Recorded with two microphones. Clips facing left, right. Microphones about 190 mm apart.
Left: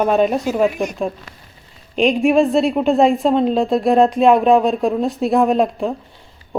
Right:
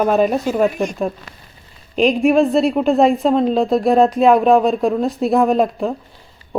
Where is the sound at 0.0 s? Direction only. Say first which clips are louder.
Even; centre (ahead or behind).